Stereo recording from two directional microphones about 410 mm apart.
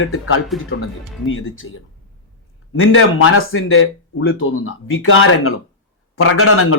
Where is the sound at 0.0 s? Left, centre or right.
Left.